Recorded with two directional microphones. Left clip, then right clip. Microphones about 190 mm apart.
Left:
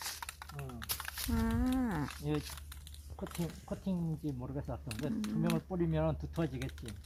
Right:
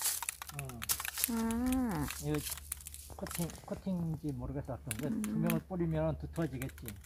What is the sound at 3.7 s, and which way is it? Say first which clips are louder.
Speech: even; 30° right (ahead or behind).